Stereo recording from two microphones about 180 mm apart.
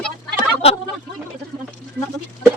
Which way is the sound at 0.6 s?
35° left (ahead or behind).